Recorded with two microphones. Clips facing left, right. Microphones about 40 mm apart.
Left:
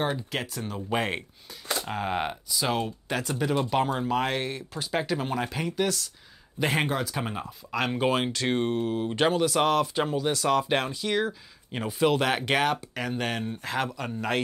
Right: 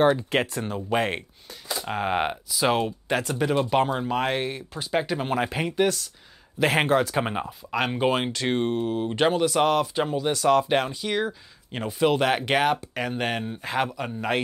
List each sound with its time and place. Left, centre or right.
0.3 s speech: right
0.7 s speech: centre
5.3 s speech: right
7.4 s speech: centre